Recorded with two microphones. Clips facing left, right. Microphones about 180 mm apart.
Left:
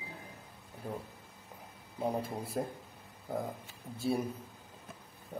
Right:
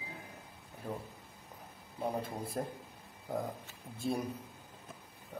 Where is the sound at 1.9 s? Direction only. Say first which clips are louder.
Left 2 dB; 5° left (ahead or behind).